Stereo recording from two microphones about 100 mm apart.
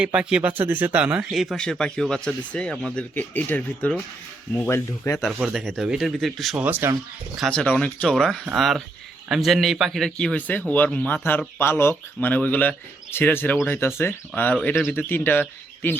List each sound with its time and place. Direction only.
0.0 s speech: 10° right (ahead or behind)
1.3 s speech: centre (ahead or behind); by 3.9 s 15° left (ahead or behind)
5.1 s speech: centre (ahead or behind)
6.6 s speech: 20° right (ahead or behind)
7.5 s speech: 10° left (ahead or behind)
11.6 s speech: 25° left (ahead or behind)